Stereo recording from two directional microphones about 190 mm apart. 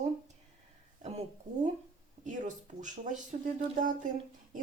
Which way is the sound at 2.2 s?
40° right (ahead or behind).